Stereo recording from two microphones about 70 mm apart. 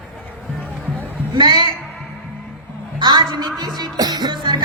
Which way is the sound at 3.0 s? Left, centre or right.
Right.